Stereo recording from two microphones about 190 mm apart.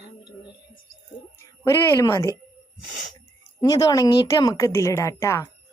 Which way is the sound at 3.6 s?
20° left (ahead or behind).